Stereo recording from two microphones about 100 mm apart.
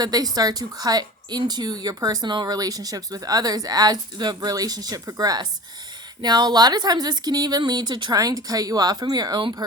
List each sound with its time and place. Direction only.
0.0 s a woman's voice: 40° right (ahead or behind)